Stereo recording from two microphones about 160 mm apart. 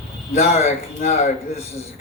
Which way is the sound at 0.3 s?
45° left (ahead or behind).